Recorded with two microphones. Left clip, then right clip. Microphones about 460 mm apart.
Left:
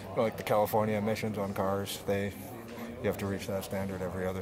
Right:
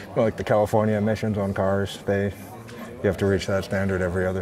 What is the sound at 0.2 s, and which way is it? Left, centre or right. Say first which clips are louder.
Speech: right 7 dB; right.